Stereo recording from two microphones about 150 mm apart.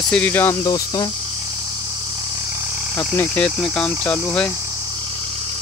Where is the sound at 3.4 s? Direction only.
5° left (ahead or behind).